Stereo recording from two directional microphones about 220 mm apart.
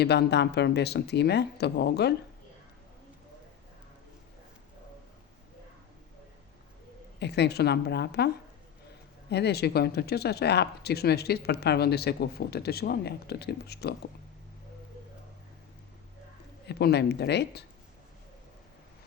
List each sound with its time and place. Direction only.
0.0 s speech: 50° left (ahead or behind)
7.2 s speech: 50° left (ahead or behind)
9.3 s speech: 50° left (ahead or behind)
16.6 s speech: 50° left (ahead or behind)